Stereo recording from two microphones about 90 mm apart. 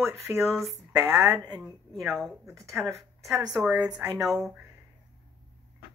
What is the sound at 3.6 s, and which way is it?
Speech, 15° right (ahead or behind).